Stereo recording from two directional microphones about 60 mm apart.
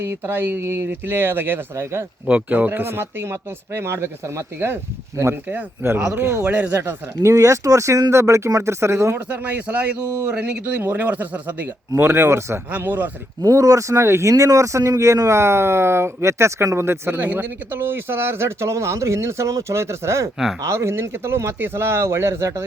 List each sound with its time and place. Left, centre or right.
0.0 s speech: right
1.7 s speech: right
2.2 s speech: right
6.4 s a man's voice: right
7.2 s speech: right
9.1 s a man's voice: right
11.9 s speech: right
12.7 s speech: right
13.4 s speech: right
17.2 s speech: right